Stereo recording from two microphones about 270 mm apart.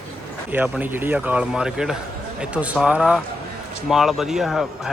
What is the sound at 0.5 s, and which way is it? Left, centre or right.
Speech, centre.